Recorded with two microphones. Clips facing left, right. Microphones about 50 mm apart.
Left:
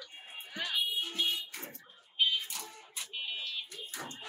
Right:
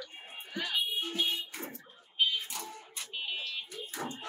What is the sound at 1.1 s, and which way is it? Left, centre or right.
Fire alarm, centre.